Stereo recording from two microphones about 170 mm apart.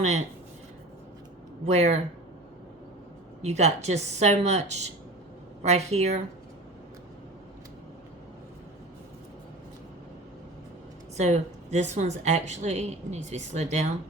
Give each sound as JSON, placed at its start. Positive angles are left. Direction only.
{"t": 0.0, "sound": "speech", "side_deg": -40}
{"t": 1.6, "sound": "speech", "side_deg": -40}
{"t": 3.4, "sound": "speech", "side_deg": -40}
{"t": 11.2, "sound": "speech", "side_deg": -40}